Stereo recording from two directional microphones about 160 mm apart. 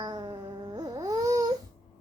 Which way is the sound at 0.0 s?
25° right (ahead or behind).